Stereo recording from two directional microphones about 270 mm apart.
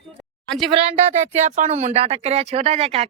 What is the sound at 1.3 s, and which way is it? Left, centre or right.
Speech, right.